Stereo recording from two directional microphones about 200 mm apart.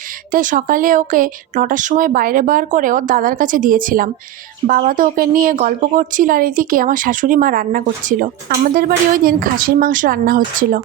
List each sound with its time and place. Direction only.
0.3 s speech: 40° right (ahead or behind)